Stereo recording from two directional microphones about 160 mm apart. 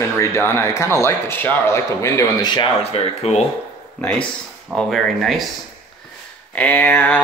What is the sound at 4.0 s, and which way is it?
Speech, 5° left (ahead or behind).